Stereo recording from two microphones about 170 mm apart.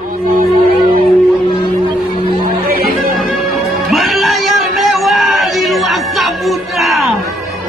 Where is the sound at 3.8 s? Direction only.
Centre (ahead or behind).